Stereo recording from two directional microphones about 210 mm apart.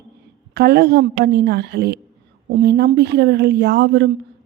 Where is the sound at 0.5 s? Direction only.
50° right (ahead or behind).